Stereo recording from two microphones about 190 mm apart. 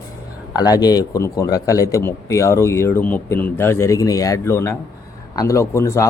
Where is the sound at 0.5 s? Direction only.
20° left (ahead or behind).